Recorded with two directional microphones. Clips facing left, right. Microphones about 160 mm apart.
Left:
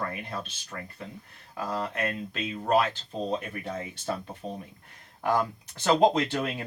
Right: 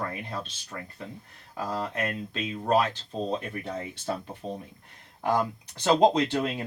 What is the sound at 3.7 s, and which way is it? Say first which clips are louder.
Speech: left 1 dB; 25° right (ahead or behind).